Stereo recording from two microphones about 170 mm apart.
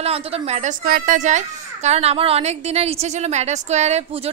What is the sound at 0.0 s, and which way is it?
A woman's voice, 35° right (ahead or behind).